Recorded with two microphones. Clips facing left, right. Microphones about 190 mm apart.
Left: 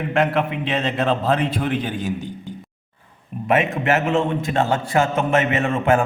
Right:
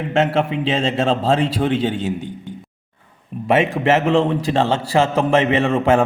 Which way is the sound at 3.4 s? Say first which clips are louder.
Right 3 dB; 30° right (ahead or behind).